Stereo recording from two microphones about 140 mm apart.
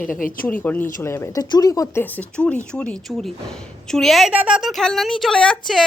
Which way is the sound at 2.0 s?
10° left (ahead or behind).